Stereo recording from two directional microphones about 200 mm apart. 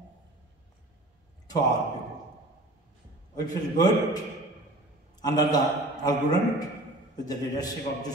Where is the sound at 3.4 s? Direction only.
20° left (ahead or behind).